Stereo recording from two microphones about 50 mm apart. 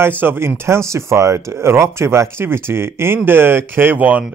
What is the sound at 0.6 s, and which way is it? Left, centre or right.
Speech, right.